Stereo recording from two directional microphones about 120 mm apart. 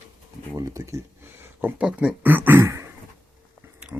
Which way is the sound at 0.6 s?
25° right (ahead or behind).